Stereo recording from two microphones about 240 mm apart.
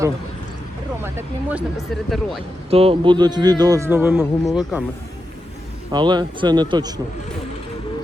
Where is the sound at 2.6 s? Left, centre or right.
Right; by 4.3 s centre.